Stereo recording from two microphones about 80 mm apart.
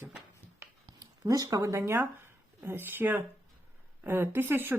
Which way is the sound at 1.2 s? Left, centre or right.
Right.